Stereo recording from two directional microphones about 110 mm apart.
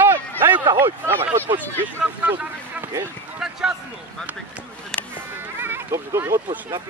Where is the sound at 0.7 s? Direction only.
20° right (ahead or behind).